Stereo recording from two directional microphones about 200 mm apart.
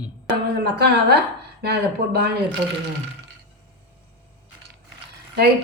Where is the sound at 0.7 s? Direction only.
55° right (ahead or behind).